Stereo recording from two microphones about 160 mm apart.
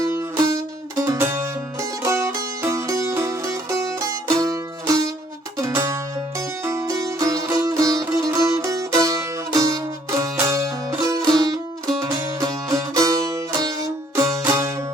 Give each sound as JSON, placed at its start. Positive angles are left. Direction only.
{"t": 0.0, "sound": "music", "side_deg": -15}